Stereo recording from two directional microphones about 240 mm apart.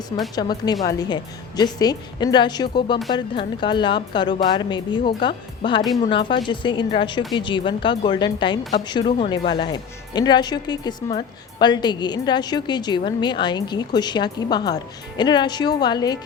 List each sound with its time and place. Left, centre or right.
0.3 s a woman's voice: centre